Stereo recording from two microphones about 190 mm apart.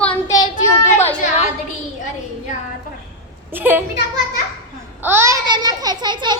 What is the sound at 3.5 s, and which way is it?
Speech, 10° right (ahead or behind).